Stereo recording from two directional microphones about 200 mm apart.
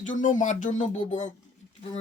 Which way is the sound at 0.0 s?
40° left (ahead or behind).